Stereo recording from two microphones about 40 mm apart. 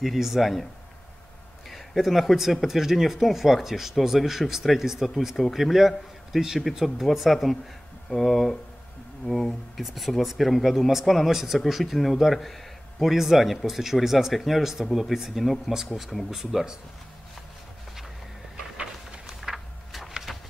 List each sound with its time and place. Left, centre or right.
0.0 s speech: centre
2.0 s speech: centre
16.3 s speech: centre
19.2 s a sound: centre